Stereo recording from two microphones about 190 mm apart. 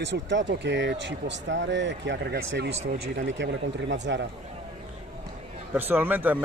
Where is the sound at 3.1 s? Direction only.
70° right (ahead or behind).